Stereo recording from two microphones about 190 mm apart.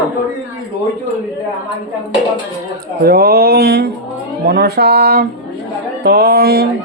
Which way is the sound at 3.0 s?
55° right (ahead or behind).